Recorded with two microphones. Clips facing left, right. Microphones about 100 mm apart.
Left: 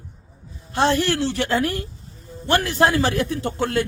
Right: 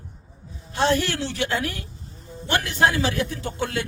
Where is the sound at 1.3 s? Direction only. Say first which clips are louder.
Left 4 dB; 50° left (ahead or behind).